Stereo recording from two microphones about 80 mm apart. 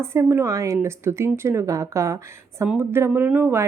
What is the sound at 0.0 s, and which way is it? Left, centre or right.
Speech, right.